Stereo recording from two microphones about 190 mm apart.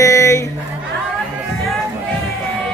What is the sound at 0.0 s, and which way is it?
Music, 15° left (ahead or behind).